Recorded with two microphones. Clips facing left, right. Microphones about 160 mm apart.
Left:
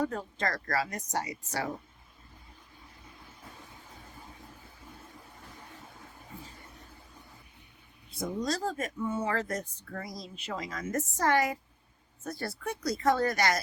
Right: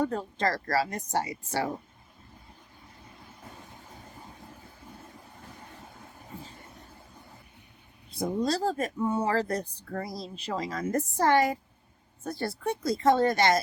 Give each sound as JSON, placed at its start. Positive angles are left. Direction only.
{"t": 0.0, "sound": "speech", "side_deg": -30}
{"t": 8.1, "sound": "speech", "side_deg": -35}